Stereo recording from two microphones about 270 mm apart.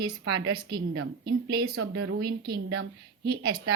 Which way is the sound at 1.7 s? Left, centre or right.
Right.